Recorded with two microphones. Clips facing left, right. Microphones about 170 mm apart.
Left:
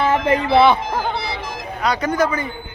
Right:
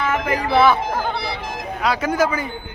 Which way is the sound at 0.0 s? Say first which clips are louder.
Left 4 dB; 30° left (ahead or behind).